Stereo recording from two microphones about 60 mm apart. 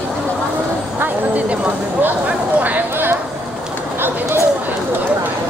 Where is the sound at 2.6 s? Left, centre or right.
Right.